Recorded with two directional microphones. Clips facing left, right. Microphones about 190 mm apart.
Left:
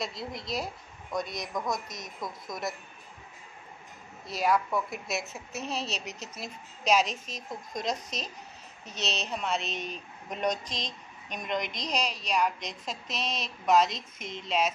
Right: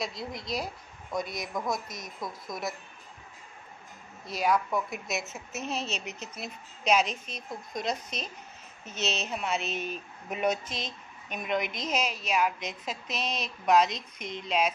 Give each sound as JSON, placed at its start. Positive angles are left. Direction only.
{"t": 0.0, "sound": "speech", "side_deg": 0}
{"t": 4.3, "sound": "speech", "side_deg": 0}
{"t": 5.8, "sound": "speech", "side_deg": 35}
{"t": 6.3, "sound": "speech", "side_deg": 0}